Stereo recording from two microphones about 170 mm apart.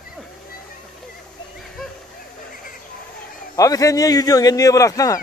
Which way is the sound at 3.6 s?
20° left (ahead or behind).